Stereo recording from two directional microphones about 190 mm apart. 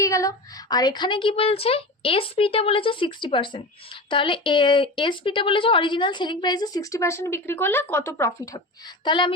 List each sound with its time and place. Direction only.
0.0 s a woman's voice: 15° left (ahead or behind)
9.0 s a woman's voice: 25° left (ahead or behind)